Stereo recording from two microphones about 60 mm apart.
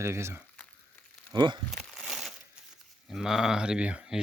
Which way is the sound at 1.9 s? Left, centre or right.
Centre.